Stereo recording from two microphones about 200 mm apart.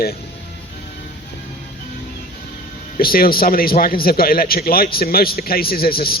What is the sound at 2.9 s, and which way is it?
A man's voice, 45° left (ahead or behind).